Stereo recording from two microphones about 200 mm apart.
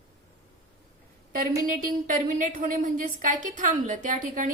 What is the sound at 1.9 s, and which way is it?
A woman's voice, 40° right (ahead or behind).